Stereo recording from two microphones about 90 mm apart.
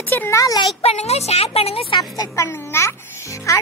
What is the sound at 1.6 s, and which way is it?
Speech, 90° left.